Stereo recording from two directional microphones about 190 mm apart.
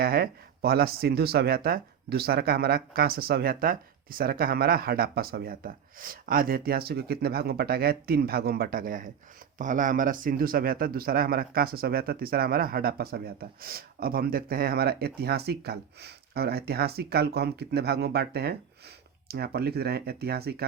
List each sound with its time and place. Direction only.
0.0 s speech: 55° right (ahead or behind)